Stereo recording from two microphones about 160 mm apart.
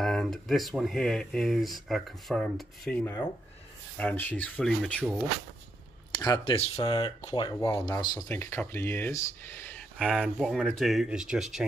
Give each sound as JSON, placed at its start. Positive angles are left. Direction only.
{"t": 0.0, "sound": "speech", "side_deg": 0}
{"t": 6.1, "sound": "speech", "side_deg": 25}
{"t": 8.3, "sound": "speech", "side_deg": 15}